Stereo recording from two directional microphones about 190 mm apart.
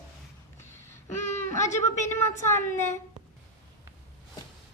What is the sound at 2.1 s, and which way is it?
Speech, 15° left (ahead or behind).